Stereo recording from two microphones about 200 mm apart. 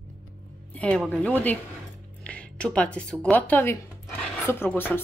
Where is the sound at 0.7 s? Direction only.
5° left (ahead or behind).